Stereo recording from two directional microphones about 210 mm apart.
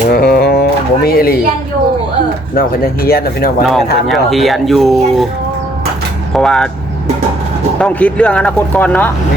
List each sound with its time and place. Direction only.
0.1 s music: 45° left (ahead or behind)
2.6 s speech: 45° left (ahead or behind)
3.6 s speech: centre (ahead or behind)
6.3 s speech: 5° left (ahead or behind)
7.8 s speech: 5° left (ahead or behind)